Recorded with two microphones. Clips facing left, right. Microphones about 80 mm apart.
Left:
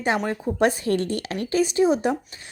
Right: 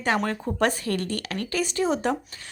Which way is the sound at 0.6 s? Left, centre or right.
Centre.